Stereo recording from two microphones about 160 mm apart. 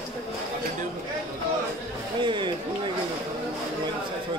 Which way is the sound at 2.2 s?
30° right (ahead or behind).